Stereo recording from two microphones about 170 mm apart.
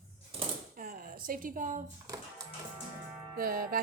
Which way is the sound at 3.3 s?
55° right (ahead or behind).